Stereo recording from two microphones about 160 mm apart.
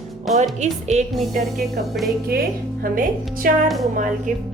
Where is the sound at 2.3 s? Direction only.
75° right (ahead or behind).